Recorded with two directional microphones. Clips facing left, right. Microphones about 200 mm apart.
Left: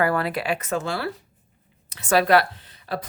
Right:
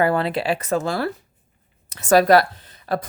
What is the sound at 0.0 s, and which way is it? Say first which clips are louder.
Speech: right 3 dB; 25° right (ahead or behind).